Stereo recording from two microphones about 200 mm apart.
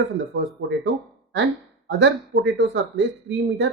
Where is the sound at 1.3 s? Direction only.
60° right (ahead or behind).